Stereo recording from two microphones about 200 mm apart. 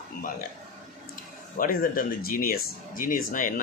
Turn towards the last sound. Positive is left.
turn(degrees=40)  # may be behind; listen again after turning